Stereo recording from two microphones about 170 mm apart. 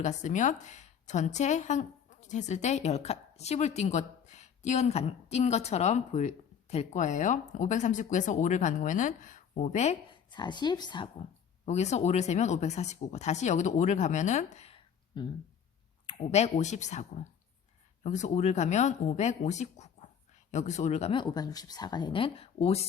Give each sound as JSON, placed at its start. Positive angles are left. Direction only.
{"t": 0.0, "sound": "a woman's voice", "side_deg": 45}
{"t": 10.2, "sound": "speech", "side_deg": 25}
{"t": 11.6, "sound": "a woman's voice", "side_deg": 40}